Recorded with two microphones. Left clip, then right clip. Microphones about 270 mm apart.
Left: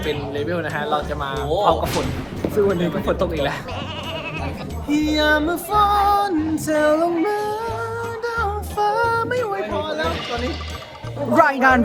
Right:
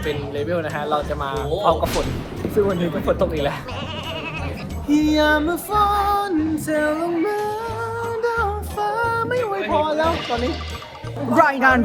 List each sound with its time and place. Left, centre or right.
0.0 s speech: centre
4.9 s music: centre
8.8 s music: centre
9.8 s music: right
10.1 s speech: centre